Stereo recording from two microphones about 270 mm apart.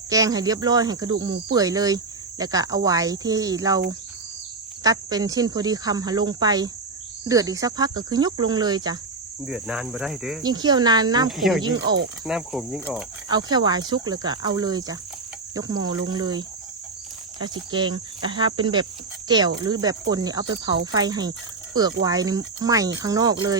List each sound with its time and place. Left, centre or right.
0.1 s speech: centre
9.5 s speech: centre
10.4 s speech: centre
11.3 s speech: centre
13.2 s speech: centre
17.4 s speech: centre